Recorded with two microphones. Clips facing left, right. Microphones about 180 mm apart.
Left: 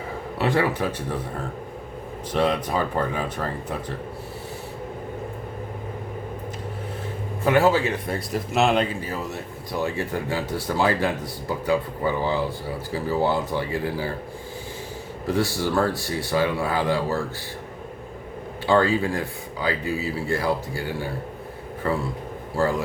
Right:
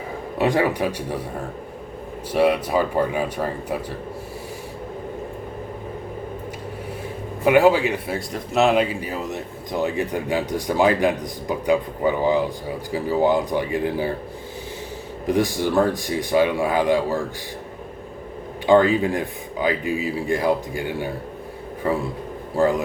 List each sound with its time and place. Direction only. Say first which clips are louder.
0.3 s speech: right 3 dB; 15° right (ahead or behind)
2.3 s speech: right 4 dB; 10° right (ahead or behind)
7.4 s speech: right 3 dB; 15° right (ahead or behind)
8.1 s speech: right 1 dB; centre (ahead or behind); by 14.1 s 20° right (ahead or behind)
15.3 s speech: right 3 dB; 15° right (ahead or behind)
18.6 s speech: right 4 dB; 20° right (ahead or behind)
22.5 s a man's voice: right 4 dB; 20° right (ahead or behind)